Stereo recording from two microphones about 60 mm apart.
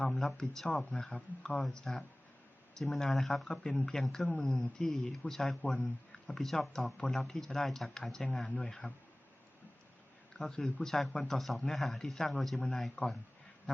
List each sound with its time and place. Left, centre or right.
0.2 s speech: centre
0.9 s speech: left
1.7 s speech: centre
4.3 s speech: centre
5.7 s speech: centre
6.3 s speech: centre
8.4 s speech: left
10.4 s speech: centre